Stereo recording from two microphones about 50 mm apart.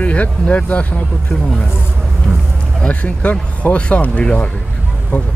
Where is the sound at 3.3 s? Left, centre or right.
Left.